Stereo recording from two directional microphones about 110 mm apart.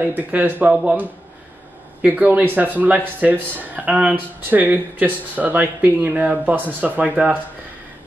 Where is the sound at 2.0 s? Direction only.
15° right (ahead or behind).